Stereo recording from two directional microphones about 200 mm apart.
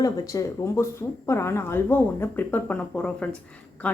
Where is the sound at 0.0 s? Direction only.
15° left (ahead or behind).